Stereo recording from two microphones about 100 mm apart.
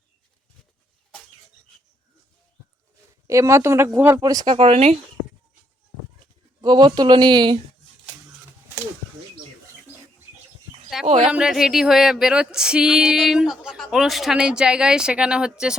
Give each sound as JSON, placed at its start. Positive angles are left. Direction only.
{"t": 3.2, "sound": "speech", "side_deg": -30}
{"t": 4.2, "sound": "speech", "side_deg": -40}
{"t": 4.4, "sound": "speech", "side_deg": -80}
{"t": 6.6, "sound": "speech", "side_deg": -45}
{"t": 11.0, "sound": "a sound", "side_deg": 0}
{"t": 11.3, "sound": "speech", "side_deg": -10}